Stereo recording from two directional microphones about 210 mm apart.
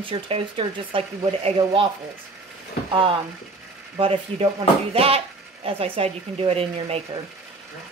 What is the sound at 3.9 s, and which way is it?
Speech, 25° right (ahead or behind).